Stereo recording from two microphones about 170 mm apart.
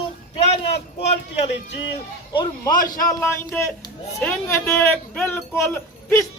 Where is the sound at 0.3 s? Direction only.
40° left (ahead or behind).